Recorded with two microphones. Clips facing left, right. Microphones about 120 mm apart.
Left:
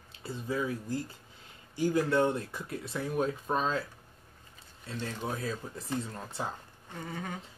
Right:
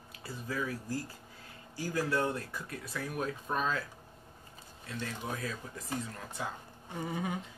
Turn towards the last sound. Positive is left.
turn(degrees=-10)  # may be behind; listen again after turning